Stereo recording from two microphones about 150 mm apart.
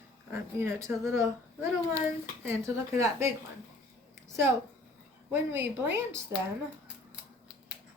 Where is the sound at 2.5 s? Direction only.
20° right (ahead or behind).